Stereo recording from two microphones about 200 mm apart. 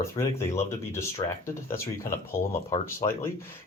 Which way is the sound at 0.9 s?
15° left (ahead or behind).